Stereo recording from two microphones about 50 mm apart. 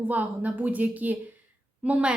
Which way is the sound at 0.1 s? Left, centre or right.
Right.